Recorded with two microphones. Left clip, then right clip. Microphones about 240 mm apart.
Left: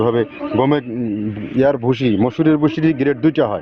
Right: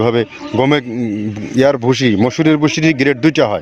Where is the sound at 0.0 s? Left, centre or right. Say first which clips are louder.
Right 2 dB; right.